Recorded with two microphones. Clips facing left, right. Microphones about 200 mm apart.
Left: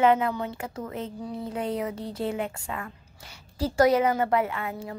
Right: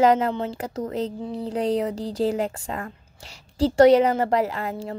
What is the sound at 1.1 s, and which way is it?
Speech, 25° right (ahead or behind).